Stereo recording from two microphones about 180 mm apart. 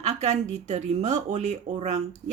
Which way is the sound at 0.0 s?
40° right (ahead or behind).